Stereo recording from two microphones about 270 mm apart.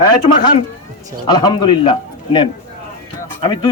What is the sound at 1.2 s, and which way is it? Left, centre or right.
Speech, centre.